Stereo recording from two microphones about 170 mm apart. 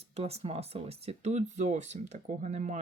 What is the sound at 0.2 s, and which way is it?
Speech, 35° right (ahead or behind).